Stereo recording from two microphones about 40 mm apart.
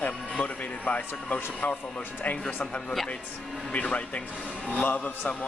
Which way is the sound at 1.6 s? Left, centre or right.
Left.